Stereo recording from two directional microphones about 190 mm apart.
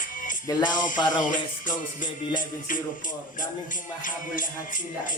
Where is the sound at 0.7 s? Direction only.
45° left (ahead or behind).